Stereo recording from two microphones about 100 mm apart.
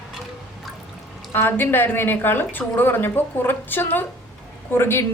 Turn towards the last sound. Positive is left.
turn(degrees=25)  # may be behind; listen again after turning